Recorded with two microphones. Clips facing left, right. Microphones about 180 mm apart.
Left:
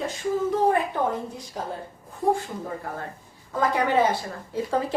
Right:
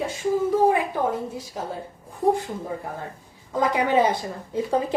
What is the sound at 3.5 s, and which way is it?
A woman's voice, 15° right (ahead or behind).